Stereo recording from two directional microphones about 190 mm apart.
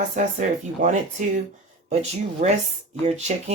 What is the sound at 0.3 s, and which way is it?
Speech, 40° right (ahead or behind).